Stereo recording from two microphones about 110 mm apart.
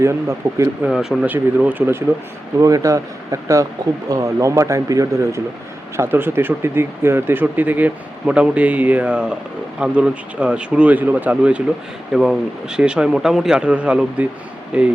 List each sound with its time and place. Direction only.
0.0 s speech: 25° right (ahead or behind)
0.9 s speech: centre (ahead or behind)
1.2 s speech: 15° right (ahead or behind)
2.6 s speech: 30° right (ahead or behind); by 14.9 s 10° right (ahead or behind)